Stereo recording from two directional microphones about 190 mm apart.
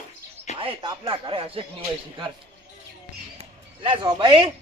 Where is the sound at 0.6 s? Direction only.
25° right (ahead or behind).